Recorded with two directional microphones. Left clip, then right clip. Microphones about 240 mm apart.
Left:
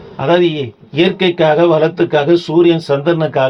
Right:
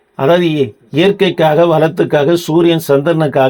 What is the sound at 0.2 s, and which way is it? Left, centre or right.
Speech, right.